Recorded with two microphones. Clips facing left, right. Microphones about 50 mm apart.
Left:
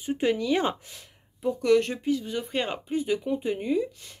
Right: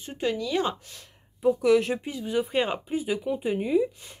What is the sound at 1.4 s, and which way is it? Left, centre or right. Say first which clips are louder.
Speech: right 1 dB; centre.